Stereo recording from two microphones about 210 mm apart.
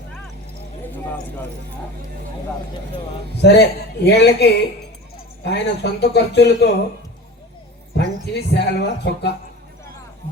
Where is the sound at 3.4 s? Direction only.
55° left (ahead or behind).